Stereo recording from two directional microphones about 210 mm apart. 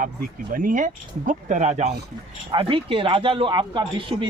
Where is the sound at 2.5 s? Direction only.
25° right (ahead or behind).